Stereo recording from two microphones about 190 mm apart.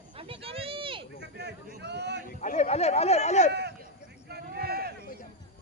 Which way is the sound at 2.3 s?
40° left (ahead or behind).